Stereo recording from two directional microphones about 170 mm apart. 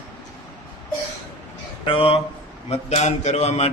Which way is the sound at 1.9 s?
30° left (ahead or behind).